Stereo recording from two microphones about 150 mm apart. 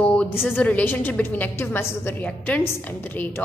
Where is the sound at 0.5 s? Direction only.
10° left (ahead or behind).